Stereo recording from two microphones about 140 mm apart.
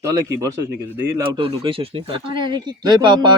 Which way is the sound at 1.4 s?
40° right (ahead or behind).